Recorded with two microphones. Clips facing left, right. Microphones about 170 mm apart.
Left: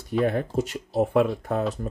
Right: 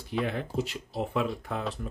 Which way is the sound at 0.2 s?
45° left (ahead or behind).